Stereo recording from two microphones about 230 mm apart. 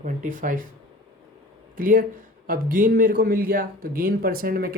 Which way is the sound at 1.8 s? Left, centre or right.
Right.